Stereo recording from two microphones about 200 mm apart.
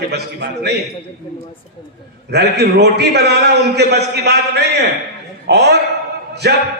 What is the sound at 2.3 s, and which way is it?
A man's voice, 55° right (ahead or behind).